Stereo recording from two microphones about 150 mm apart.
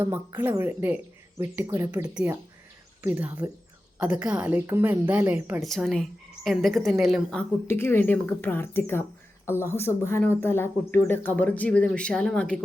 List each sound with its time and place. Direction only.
0.0 s a woman's voice: 15° right (ahead or behind)
3.0 s a woman's voice: 10° right (ahead or behind)
5.6 s a woman's voice: centre (ahead or behind)
7.7 s speech: 15° left (ahead or behind)